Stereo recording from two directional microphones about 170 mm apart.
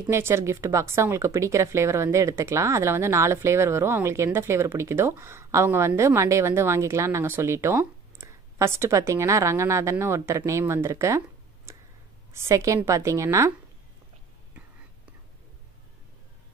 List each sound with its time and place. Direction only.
0.0 s speech: 15° right (ahead or behind)